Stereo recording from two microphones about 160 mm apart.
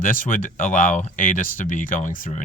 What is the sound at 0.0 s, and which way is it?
Speech, 60° left (ahead or behind).